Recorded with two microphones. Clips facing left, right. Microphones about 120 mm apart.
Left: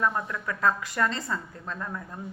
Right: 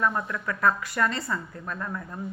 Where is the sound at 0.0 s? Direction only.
25° left (ahead or behind).